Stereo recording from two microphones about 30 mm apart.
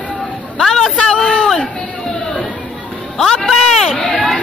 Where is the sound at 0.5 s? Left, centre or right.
Left.